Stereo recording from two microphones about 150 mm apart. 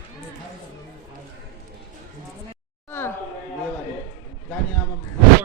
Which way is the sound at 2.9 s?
15° left (ahead or behind).